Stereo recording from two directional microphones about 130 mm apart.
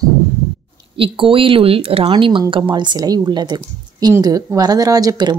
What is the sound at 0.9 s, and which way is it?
A woman's voice, 45° right (ahead or behind).